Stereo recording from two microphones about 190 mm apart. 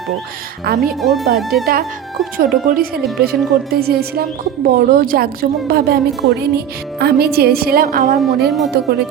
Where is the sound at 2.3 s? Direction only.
50° right (ahead or behind).